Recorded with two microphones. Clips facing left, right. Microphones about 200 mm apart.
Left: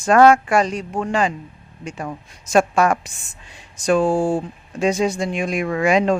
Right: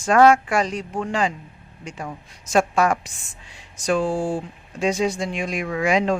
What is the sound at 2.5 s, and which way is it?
Speech, 50° left (ahead or behind).